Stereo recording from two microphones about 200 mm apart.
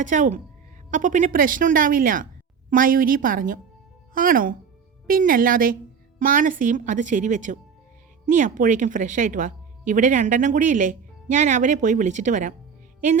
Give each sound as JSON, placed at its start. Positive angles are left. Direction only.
{"t": 0.0, "sound": "a woman's voice", "side_deg": -40}